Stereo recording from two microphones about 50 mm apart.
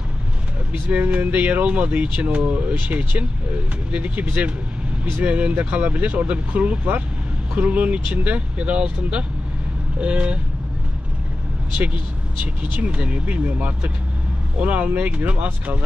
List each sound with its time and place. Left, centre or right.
0.8 s speech: right
12.8 s speech: right